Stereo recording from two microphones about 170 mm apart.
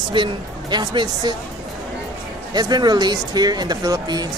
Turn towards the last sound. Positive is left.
turn(degrees=-25)  # may be behind; listen again after turning